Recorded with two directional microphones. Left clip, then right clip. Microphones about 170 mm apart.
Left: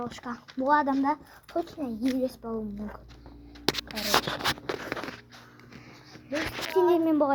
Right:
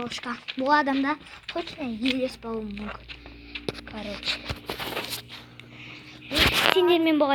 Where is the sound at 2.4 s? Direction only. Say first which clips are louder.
Right 2 dB; 10° right (ahead or behind).